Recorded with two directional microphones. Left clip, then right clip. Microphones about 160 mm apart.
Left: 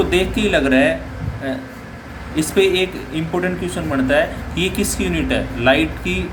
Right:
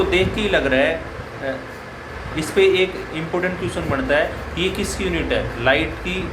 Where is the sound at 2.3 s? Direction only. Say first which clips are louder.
Even; 45° left (ahead or behind).